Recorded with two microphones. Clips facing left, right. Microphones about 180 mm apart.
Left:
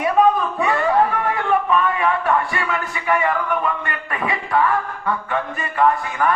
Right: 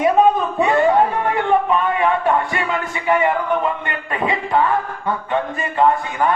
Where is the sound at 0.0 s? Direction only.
25° right (ahead or behind).